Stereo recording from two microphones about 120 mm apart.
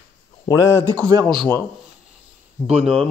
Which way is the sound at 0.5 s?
25° left (ahead or behind).